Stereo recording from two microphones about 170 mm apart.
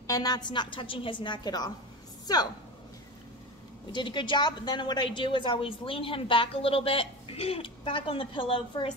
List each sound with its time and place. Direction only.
0.0 s a woman's voice: 20° left (ahead or behind)
3.9 s a woman's voice: 30° left (ahead or behind)